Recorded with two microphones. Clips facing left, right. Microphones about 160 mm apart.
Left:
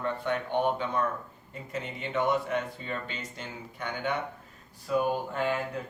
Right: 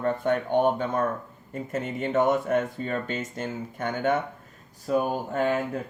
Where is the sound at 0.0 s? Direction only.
45° right (ahead or behind).